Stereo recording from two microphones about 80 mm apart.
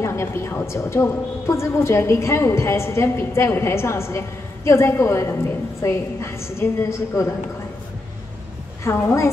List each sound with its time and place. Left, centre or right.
0.0 s a woman's voice: left
8.8 s a woman's voice: left